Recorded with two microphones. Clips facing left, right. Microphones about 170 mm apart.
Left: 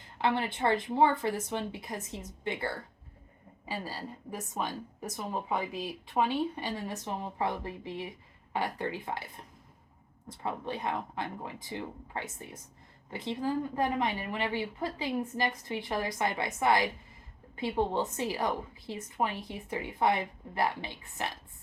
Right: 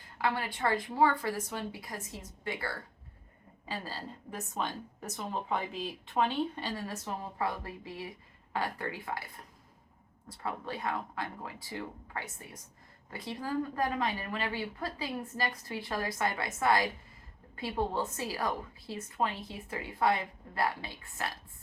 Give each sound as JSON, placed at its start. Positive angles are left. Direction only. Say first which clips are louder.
{"t": 0.2, "sound": "a woman's voice", "louder": "left 3 dB", "side_deg": 25}
{"t": 10.2, "sound": "a woman's voice", "louder": "left 2 dB", "side_deg": 20}